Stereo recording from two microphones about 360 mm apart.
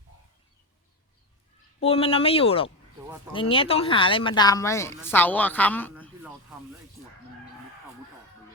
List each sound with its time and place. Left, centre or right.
1.8 s a woman's voice: centre